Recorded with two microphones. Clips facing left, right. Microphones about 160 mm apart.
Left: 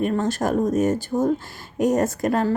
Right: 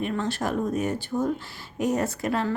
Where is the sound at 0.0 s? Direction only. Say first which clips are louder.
Left 5 dB; 45° left (ahead or behind).